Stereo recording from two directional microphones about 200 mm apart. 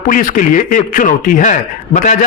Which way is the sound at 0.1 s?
40° left (ahead or behind).